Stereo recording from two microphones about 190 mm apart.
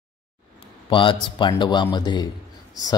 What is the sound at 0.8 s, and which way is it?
A man's voice, 25° left (ahead or behind).